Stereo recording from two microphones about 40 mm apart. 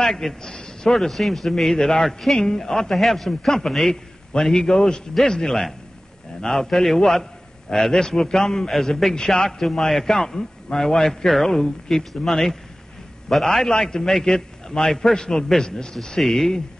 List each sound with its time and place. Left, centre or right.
0.0 s a man's voice: centre
16.2 s speech: centre